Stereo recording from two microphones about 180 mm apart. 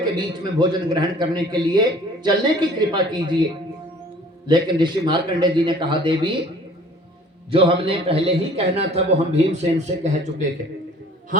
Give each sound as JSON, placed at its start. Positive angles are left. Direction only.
{"t": 0.0, "sound": "a man's voice", "side_deg": -25}
{"t": 4.4, "sound": "a man's voice", "side_deg": -25}
{"t": 7.5, "sound": "a man's voice", "side_deg": -30}